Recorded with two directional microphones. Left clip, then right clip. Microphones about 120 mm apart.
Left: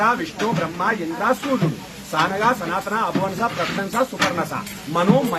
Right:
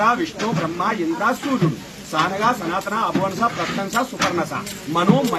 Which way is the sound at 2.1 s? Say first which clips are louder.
Even; 25° left (ahead or behind).